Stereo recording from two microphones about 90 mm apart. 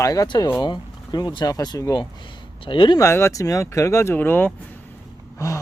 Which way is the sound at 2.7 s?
65° left (ahead or behind).